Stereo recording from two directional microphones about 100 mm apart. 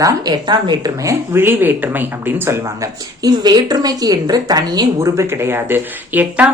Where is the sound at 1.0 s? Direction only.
25° right (ahead or behind).